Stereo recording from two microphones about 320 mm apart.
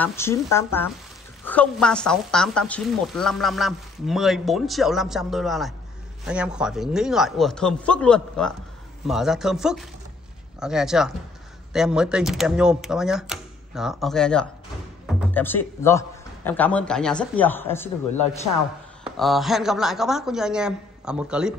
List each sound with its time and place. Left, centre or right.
0.0 s a woman's voice: centre